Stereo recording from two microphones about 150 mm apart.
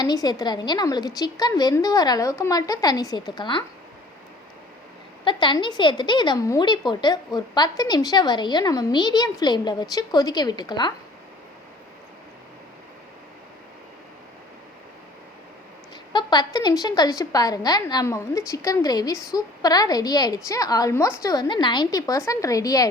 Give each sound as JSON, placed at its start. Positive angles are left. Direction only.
{"t": 0.0, "sound": "a woman's voice", "side_deg": 25}
{"t": 5.2, "sound": "a woman's voice", "side_deg": 35}
{"t": 16.1, "sound": "a woman's voice", "side_deg": 30}